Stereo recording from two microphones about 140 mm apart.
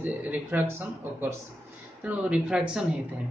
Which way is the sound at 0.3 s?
10° right (ahead or behind).